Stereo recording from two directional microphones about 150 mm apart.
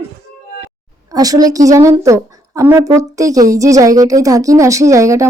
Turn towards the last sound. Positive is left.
turn(degrees=-20)  # may be behind; listen again after turning